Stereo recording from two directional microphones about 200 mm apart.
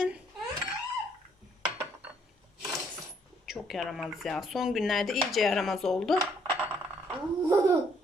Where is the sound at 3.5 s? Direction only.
Centre (ahead or behind).